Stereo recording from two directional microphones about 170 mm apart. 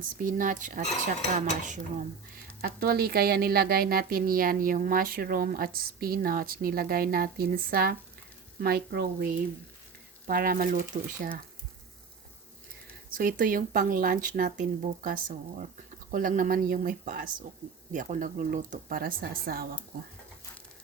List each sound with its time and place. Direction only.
0.2 s speech: 55° right (ahead or behind)
2.6 s speech: 60° right (ahead or behind)
13.1 s speech: 55° right (ahead or behind)